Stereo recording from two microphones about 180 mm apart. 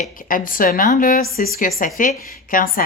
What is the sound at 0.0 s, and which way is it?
A woman's voice, 50° left (ahead or behind).